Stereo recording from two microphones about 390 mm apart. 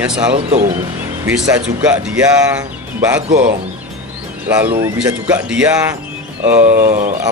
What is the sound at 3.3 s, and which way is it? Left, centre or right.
Speech, right.